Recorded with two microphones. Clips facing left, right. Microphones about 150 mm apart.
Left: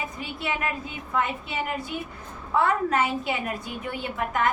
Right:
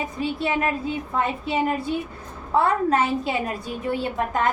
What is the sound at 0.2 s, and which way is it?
A woman's voice, 30° right (ahead or behind).